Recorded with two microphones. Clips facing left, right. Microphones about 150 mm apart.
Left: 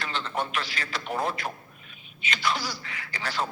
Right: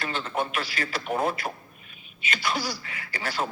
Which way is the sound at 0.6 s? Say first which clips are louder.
Right 2 dB; 40° right (ahead or behind).